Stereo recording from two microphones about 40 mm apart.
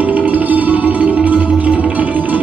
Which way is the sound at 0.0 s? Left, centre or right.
Right.